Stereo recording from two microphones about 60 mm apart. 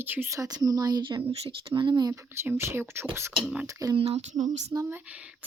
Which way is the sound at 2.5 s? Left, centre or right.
Right.